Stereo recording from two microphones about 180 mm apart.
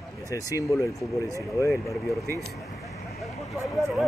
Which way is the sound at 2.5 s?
Centre (ahead or behind).